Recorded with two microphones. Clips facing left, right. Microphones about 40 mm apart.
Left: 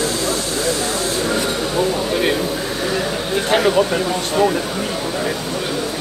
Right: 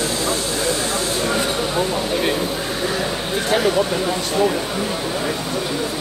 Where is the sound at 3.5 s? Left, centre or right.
Left.